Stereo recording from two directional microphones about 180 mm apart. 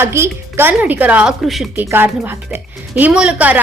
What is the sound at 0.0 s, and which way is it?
A woman's voice, 15° right (ahead or behind).